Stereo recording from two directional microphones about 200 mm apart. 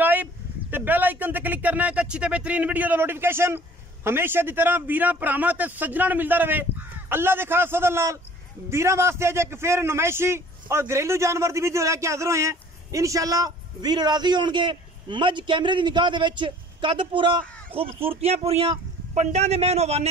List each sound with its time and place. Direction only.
0.0 s a man's voice: 10° right (ahead or behind); by 20.1 s 30° right (ahead or behind)